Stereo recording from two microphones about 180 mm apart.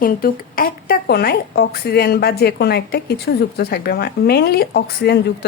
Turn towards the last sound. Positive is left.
turn(degrees=65)  # may be behind; listen again after turning